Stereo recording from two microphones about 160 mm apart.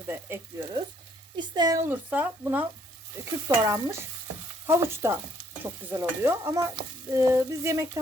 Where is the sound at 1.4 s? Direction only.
25° right (ahead or behind).